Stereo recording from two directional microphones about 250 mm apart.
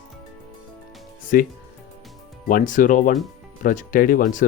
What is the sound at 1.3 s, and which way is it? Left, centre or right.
Speech, left.